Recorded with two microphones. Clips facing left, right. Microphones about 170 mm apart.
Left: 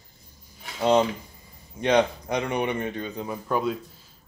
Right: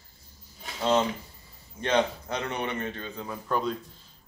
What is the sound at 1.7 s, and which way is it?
A man's voice, 15° left (ahead or behind).